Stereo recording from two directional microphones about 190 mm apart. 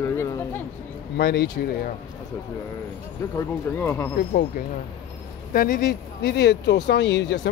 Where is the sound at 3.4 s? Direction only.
15° left (ahead or behind).